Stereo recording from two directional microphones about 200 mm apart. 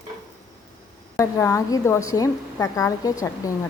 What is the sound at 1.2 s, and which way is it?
A woman's voice, 15° left (ahead or behind).